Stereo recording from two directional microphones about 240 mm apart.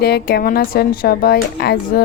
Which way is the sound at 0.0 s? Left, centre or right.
Left.